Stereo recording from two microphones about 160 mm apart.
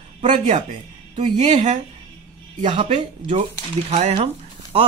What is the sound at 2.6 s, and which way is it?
Speech, 30° right (ahead or behind).